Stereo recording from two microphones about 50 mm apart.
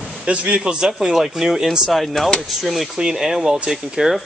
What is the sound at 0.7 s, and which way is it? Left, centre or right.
Speech, centre.